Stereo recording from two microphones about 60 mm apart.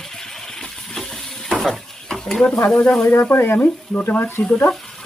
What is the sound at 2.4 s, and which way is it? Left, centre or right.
Speech, centre.